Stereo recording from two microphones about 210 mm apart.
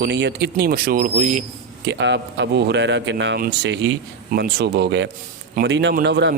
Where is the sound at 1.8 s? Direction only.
55° right (ahead or behind).